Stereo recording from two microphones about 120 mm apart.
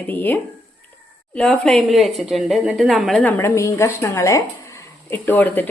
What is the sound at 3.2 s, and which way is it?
A woman's voice, 20° left (ahead or behind).